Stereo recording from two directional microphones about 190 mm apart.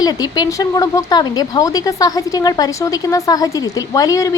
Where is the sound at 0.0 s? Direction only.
20° left (ahead or behind).